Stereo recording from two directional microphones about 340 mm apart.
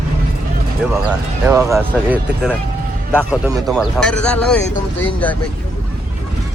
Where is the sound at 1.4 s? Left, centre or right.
Centre.